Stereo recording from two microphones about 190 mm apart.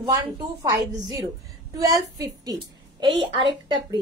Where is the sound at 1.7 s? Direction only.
20° right (ahead or behind).